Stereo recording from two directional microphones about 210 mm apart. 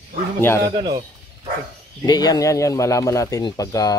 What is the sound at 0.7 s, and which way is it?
Speech, 20° right (ahead or behind).